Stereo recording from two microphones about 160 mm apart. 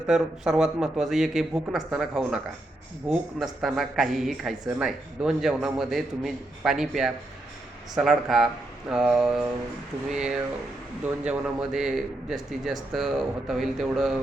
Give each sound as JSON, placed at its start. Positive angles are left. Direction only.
{"t": 0.1, "sound": "speech", "side_deg": -5}